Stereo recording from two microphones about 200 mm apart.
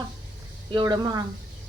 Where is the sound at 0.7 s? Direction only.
20° right (ahead or behind).